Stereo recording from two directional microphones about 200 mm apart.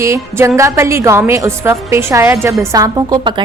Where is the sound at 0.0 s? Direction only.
15° right (ahead or behind).